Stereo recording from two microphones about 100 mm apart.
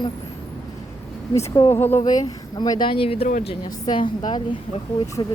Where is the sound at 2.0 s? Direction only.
40° left (ahead or behind); by 3.6 s 65° left (ahead or behind).